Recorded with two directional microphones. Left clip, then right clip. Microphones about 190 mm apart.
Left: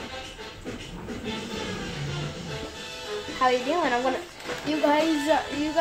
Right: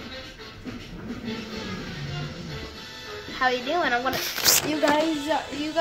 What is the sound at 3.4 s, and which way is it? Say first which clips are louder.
Speech: even; 20° left (ahead or behind).